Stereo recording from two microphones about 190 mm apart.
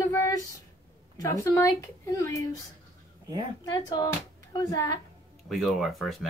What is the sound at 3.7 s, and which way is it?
A woman's voice, 20° left (ahead or behind).